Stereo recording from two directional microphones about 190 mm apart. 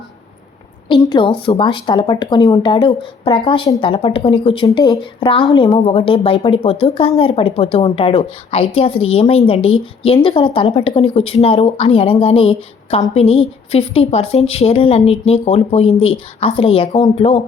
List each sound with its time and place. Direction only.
0.9 s a woman's voice: 25° left (ahead or behind)